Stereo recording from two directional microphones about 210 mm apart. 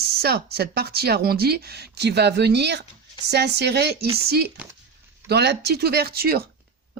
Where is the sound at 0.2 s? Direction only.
50° right (ahead or behind).